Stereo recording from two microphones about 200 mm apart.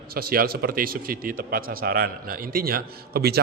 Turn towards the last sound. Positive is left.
turn(degrees=-50)  # may be behind; listen again after turning